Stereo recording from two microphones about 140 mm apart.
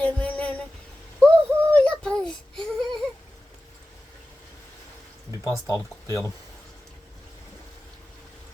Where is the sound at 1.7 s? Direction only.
5° left (ahead or behind).